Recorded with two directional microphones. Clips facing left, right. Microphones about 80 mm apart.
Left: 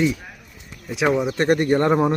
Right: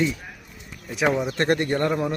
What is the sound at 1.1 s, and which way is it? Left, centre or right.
Speech, centre.